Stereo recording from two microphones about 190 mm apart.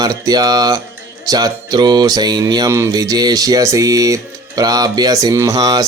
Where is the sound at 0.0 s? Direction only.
20° right (ahead or behind).